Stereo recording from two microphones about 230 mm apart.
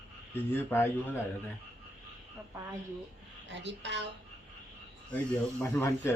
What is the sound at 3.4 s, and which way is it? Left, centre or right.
Speech, right.